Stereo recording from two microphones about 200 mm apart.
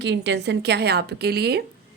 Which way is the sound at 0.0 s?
60° right (ahead or behind).